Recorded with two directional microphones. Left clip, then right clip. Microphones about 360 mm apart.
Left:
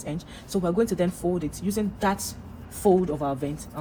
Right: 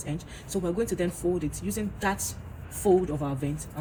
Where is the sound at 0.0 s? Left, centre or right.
Centre.